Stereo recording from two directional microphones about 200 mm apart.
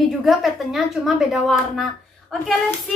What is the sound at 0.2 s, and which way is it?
A woman's voice, centre (ahead or behind).